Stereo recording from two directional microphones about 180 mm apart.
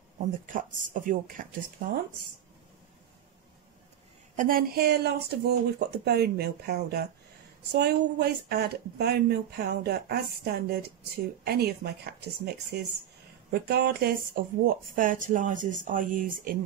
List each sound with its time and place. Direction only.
0.5 s speech: 45° right (ahead or behind)
4.4 s speech: 50° right (ahead or behind)